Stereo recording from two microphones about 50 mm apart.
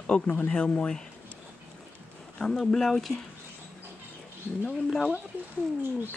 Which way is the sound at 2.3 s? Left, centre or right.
Centre.